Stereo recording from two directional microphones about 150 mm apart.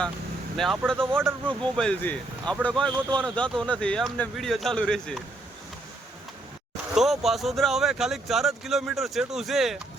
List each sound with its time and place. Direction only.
0.5 s speech: centre (ahead or behind)
1.1 s speech: 15° right (ahead or behind)
1.5 s speech: 5° left (ahead or behind)
6.9 s speech: centre (ahead or behind)